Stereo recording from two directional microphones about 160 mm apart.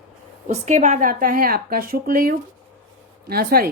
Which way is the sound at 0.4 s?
45° right (ahead or behind).